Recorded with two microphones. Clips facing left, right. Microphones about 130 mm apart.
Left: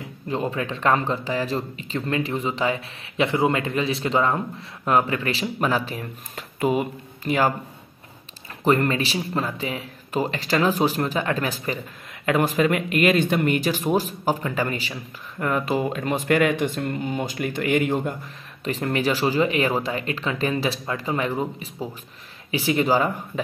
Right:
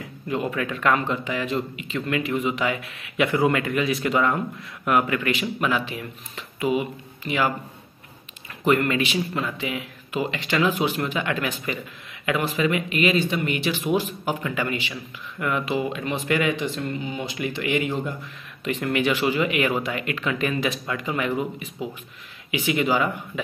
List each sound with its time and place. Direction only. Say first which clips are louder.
0.3 s speech: even; 30° left (ahead or behind)
8.6 s speech: even; 35° left (ahead or behind)
18.6 s speech: even; 35° left (ahead or behind)